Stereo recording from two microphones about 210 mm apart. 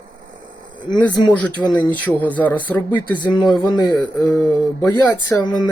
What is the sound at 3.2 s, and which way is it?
Speech, 20° left (ahead or behind).